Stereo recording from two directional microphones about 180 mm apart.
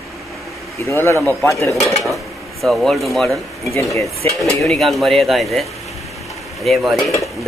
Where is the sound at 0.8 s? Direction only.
15° left (ahead or behind).